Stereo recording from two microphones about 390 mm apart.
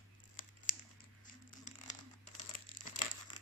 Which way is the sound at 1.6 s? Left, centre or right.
Centre.